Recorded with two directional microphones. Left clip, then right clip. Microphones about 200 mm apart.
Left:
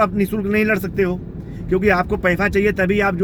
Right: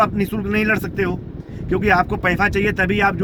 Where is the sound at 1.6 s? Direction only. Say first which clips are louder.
Even; 45° right (ahead or behind).